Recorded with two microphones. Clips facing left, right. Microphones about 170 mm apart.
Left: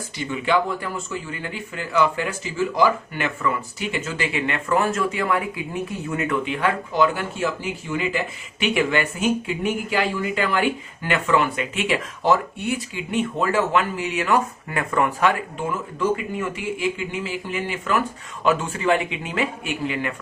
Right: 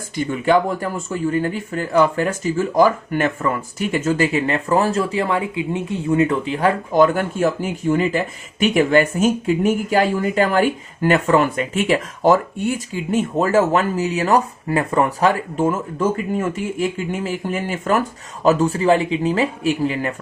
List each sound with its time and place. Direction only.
0.2 s speech: 45° right (ahead or behind)